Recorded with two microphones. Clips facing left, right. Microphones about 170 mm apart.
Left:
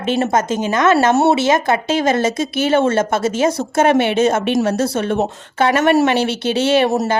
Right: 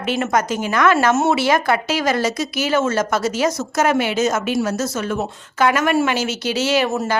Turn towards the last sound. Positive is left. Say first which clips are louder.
# left 4 dB
turn(degrees=35)  # may be behind; listen again after turning